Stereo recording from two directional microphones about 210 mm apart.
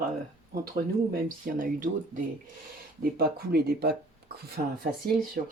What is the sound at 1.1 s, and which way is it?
Speech, 40° right (ahead or behind).